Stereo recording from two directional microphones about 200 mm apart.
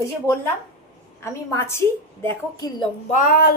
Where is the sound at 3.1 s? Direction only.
45° left (ahead or behind).